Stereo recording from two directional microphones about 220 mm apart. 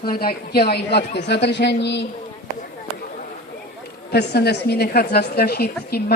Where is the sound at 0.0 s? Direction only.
45° left (ahead or behind).